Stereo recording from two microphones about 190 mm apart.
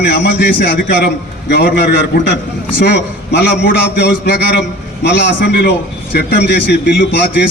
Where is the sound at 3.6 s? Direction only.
60° left (ahead or behind).